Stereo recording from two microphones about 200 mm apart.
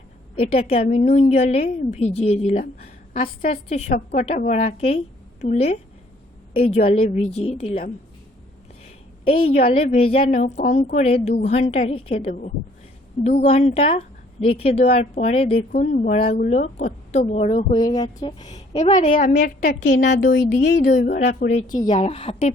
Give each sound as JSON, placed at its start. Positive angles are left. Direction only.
{"t": 0.3, "sound": "a woman's voice", "side_deg": 30}
{"t": 9.2, "sound": "a woman's voice", "side_deg": 25}
{"t": 10.4, "sound": "speech", "side_deg": 45}
{"t": 10.9, "sound": "a woman's voice", "side_deg": 30}
{"t": 15.7, "sound": "a woman's voice", "side_deg": 40}
{"t": 18.8, "sound": "a woman's voice", "side_deg": 35}
{"t": 19.8, "sound": "a woman's voice", "side_deg": 60}
{"t": 20.9, "sound": "a woman's voice", "side_deg": 45}